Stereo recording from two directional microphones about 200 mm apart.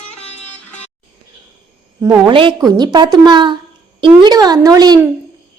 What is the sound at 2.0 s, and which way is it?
A woman's voice, 20° right (ahead or behind).